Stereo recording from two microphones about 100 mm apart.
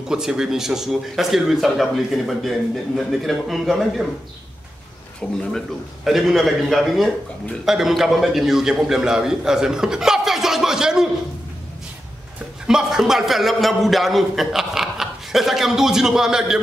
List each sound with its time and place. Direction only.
0.1 s a man's voice: 5° right (ahead or behind)
5.2 s a man's voice: 5° left (ahead or behind)
12.6 s a man's voice: 5° right (ahead or behind)